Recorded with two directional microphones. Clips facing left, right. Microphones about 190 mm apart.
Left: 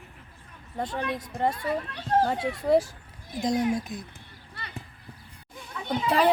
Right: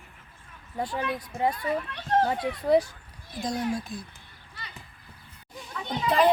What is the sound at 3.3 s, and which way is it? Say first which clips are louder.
Speech: left 4 dB; 20° left (ahead or behind).